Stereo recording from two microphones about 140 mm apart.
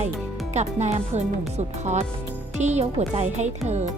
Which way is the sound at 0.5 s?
55° right (ahead or behind).